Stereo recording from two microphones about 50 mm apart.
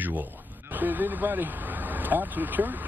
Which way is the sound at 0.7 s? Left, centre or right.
Right.